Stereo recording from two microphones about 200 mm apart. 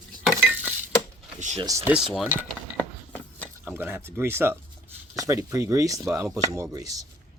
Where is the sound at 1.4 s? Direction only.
35° right (ahead or behind).